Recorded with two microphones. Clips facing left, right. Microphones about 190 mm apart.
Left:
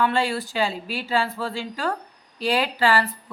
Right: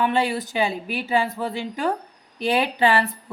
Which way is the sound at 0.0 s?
20° right (ahead or behind).